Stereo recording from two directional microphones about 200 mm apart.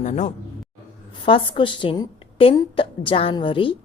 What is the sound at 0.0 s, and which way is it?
A man's voice, 35° left (ahead or behind).